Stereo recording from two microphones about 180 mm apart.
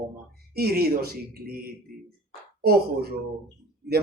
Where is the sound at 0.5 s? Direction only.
60° right (ahead or behind).